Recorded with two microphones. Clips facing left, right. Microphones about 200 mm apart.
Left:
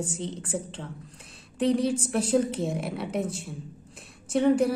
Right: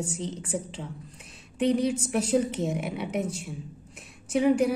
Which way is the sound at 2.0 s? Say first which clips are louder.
Left 1 dB; centre (ahead or behind).